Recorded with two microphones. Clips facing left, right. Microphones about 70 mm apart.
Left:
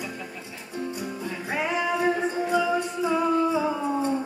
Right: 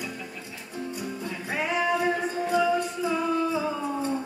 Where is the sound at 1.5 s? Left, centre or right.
Centre.